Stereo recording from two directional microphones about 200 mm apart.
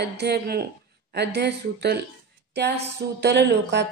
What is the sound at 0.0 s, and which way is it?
Speech, 55° right (ahead or behind).